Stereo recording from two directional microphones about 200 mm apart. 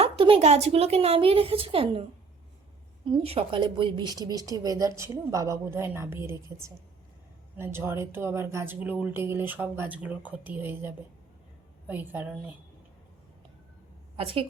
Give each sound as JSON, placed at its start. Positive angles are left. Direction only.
{"t": 0.0, "sound": "a woman's voice", "side_deg": -30}
{"t": 3.1, "sound": "a woman's voice", "side_deg": -25}
{"t": 14.2, "sound": "a woman's voice", "side_deg": -30}